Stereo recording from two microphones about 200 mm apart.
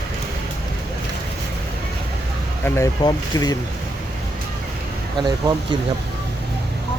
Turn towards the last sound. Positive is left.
turn(degrees=-20)  # may be behind; listen again after turning